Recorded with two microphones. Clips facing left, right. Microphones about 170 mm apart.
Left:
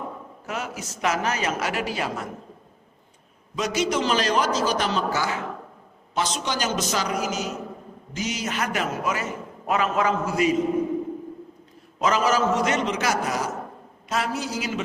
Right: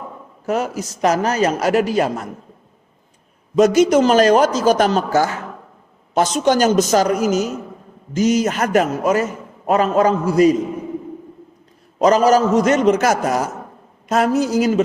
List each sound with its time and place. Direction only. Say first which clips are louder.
0.4 s a man's voice: right 11 dB; 40° right (ahead or behind)
3.5 s a man's voice: right 12 dB; 45° right (ahead or behind)
11.9 s a man's voice: right 9 dB; 40° right (ahead or behind)